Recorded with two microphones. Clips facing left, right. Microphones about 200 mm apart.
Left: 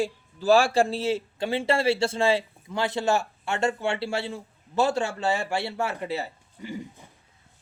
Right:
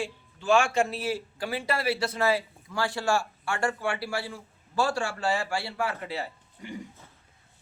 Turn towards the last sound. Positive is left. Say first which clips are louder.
# left 3 dB
turn(degrees=25)  # may be behind; listen again after turning